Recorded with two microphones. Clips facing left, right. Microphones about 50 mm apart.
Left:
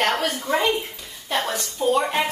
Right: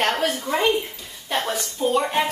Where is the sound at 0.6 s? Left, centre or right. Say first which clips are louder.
Right 2 dB; left.